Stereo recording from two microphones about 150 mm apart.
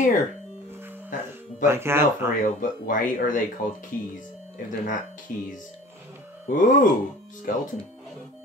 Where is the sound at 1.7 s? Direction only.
15° right (ahead or behind).